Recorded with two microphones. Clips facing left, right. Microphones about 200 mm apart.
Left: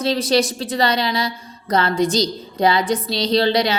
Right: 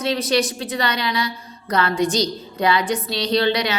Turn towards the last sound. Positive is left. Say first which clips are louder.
# left 2 dB
turn(degrees=30)  # may be behind; listen again after turning